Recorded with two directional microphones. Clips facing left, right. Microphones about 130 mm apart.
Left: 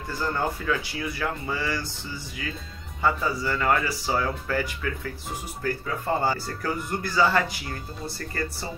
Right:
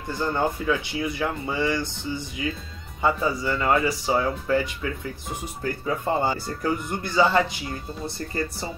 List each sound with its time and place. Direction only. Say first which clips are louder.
0.1 s speech: right 3 dB; 20° right (ahead or behind)